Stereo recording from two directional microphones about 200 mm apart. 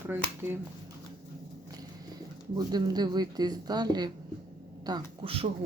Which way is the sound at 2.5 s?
20° right (ahead or behind).